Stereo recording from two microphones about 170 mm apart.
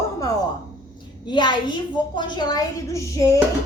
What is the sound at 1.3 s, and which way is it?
A woman's voice, 25° left (ahead or behind).